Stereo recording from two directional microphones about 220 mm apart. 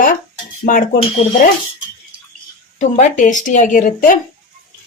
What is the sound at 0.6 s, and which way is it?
Speech, 40° left (ahead or behind).